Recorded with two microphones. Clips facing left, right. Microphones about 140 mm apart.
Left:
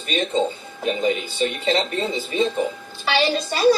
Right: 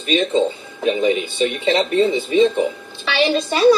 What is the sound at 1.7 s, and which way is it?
Speech, 55° right (ahead or behind).